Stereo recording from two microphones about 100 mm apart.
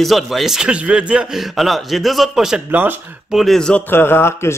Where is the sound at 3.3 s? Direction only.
Centre (ahead or behind).